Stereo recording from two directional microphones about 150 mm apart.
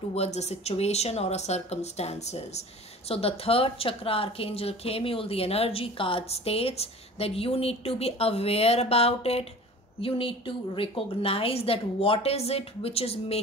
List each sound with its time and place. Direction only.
0.1 s a woman's voice: 45° left (ahead or behind)